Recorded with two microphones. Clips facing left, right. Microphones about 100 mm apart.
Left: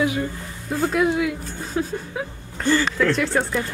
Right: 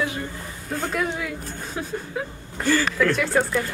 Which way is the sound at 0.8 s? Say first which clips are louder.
Left 6 dB; centre (ahead or behind).